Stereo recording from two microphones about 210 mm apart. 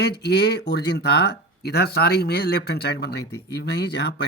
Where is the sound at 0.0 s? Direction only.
50° left (ahead or behind).